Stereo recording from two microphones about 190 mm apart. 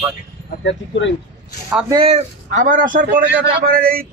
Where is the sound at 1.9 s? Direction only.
30° right (ahead or behind).